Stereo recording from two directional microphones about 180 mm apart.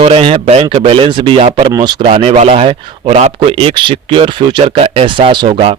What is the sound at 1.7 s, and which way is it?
A man's voice, 25° right (ahead or behind).